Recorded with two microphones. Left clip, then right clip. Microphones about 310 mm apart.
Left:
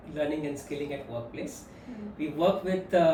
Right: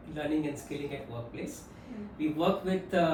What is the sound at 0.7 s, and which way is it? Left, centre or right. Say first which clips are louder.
Speech: left 3 dB; centre.